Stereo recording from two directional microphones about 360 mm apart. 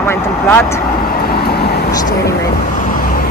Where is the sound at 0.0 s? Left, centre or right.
Centre.